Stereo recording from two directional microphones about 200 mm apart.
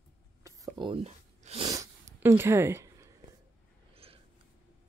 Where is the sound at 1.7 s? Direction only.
15° right (ahead or behind).